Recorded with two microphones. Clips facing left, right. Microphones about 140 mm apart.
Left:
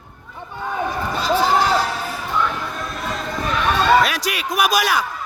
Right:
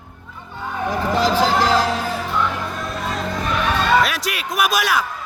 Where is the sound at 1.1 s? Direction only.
90° right.